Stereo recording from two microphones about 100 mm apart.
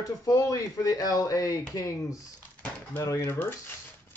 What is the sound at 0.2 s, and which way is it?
Speech, 35° left (ahead or behind).